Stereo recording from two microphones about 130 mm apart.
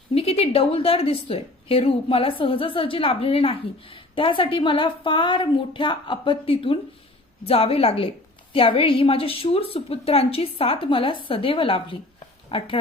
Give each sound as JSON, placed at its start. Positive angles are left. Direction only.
{"t": 0.1, "sound": "a woman's voice", "side_deg": 50}